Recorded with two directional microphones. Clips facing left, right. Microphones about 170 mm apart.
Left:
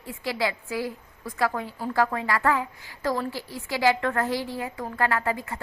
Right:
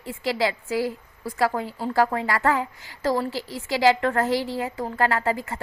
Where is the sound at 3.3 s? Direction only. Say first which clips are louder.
Right 3 dB; 90° right.